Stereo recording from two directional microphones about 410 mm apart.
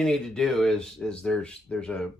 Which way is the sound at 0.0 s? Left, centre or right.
Centre.